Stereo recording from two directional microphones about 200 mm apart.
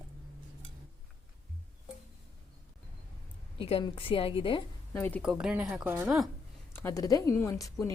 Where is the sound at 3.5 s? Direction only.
25° left (ahead or behind).